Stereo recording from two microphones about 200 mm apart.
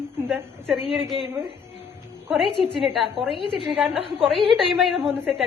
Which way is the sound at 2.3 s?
5° right (ahead or behind).